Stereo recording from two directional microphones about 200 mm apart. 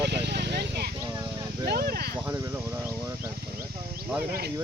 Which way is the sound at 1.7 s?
50° right (ahead or behind).